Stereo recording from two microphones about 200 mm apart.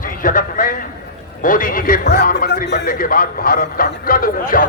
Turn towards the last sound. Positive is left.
turn(degrees=45)  # may be behind; listen again after turning